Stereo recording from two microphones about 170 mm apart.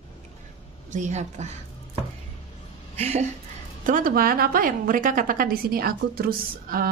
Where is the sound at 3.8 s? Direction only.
55° right (ahead or behind).